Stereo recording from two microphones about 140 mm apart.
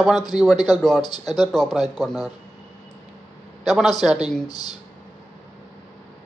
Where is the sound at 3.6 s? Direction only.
Centre (ahead or behind).